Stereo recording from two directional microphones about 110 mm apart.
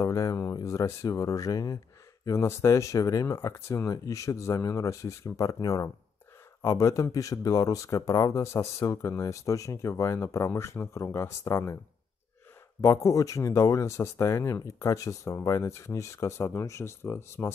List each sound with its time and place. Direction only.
0.0 s speech: 30° left (ahead or behind)
12.8 s speech: 25° left (ahead or behind)